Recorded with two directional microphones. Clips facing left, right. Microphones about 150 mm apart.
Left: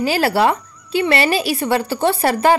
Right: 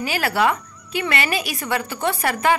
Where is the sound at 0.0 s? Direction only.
30° left (ahead or behind).